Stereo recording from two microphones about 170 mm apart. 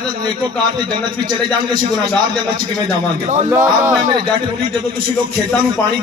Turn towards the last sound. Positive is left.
turn(degrees=-15)  # may be behind; listen again after turning